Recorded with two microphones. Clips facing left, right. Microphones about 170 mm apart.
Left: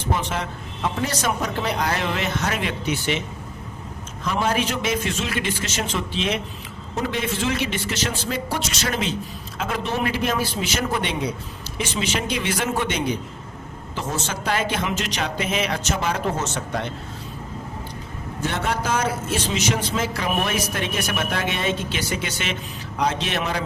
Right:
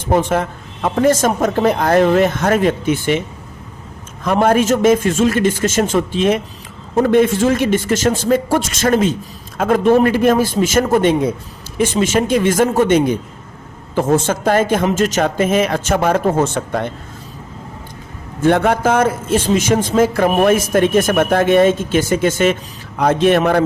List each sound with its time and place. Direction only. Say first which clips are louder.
0.1 s a man's voice: right 11 dB; 50° right (ahead or behind)
18.4 s a man's voice: right 12 dB; 55° right (ahead or behind)